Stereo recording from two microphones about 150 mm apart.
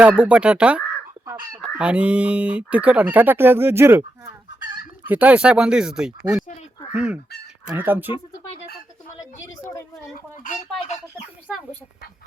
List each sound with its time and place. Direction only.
0.0 s speech: 10° right (ahead or behind)
1.8 s speech: 10° right (ahead or behind)
9.4 s speech: 20° left (ahead or behind)
10.4 s speech: 55° left (ahead or behind)